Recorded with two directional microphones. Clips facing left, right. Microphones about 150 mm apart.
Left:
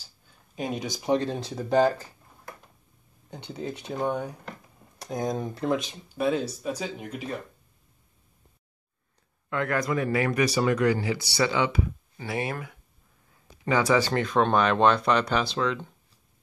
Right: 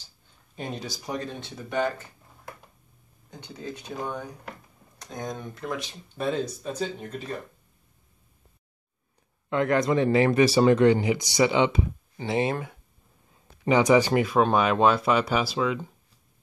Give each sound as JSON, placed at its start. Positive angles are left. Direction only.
{"t": 0.6, "sound": "speech", "side_deg": 10}
{"t": 3.5, "sound": "speech", "side_deg": 25}
{"t": 6.1, "sound": "speech", "side_deg": 5}
{"t": 9.5, "sound": "speech", "side_deg": -20}